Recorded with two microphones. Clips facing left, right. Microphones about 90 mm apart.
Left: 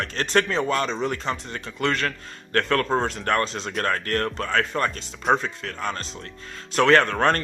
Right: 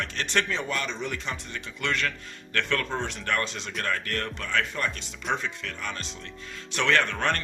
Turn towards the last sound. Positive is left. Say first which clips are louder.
# left 7 dB
turn(degrees=45)  # may be behind; listen again after turning